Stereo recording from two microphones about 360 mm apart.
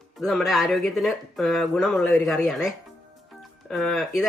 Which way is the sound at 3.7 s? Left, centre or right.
Centre.